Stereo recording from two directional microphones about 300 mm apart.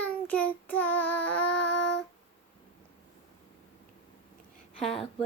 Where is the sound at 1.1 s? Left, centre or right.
Left.